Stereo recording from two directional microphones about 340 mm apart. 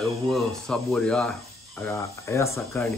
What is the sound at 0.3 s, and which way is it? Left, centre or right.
Speech, centre.